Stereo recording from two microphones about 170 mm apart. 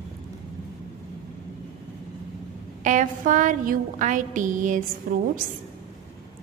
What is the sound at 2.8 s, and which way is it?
A woman's voice, 45° right (ahead or behind).